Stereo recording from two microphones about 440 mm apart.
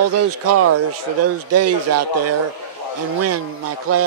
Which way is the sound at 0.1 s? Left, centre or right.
Right.